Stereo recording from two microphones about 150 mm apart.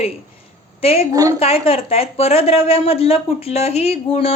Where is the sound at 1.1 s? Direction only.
20° right (ahead or behind).